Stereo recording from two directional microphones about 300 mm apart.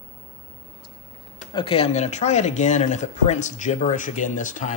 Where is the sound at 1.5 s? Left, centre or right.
Centre.